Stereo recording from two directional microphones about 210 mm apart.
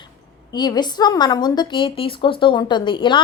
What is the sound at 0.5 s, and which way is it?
A woman's voice, 20° left (ahead or behind).